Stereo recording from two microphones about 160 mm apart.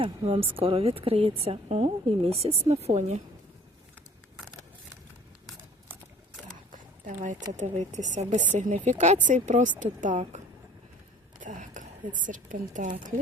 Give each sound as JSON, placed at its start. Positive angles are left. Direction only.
{"t": 0.0, "sound": "a woman's voice", "side_deg": -35}
{"t": 6.7, "sound": "a sound", "side_deg": -55}
{"t": 7.5, "sound": "speech", "side_deg": -50}
{"t": 11.4, "sound": "a woman's voice", "side_deg": -50}